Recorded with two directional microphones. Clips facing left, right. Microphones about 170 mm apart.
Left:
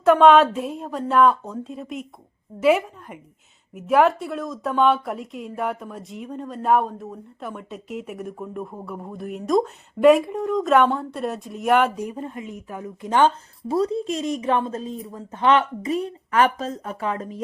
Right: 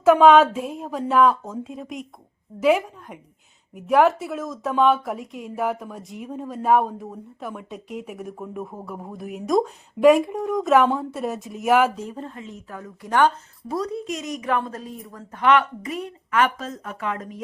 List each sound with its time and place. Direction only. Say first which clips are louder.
0.0 s speech: even; centre (ahead or behind)
11.9 s a woman's voice: left 3 dB; 10° left (ahead or behind); by 17.4 s 30° left (ahead or behind)